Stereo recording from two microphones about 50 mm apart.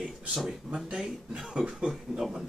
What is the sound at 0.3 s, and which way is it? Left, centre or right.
Speech, centre.